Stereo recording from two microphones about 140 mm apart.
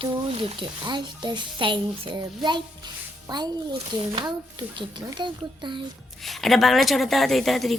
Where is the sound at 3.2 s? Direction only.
30° right (ahead or behind).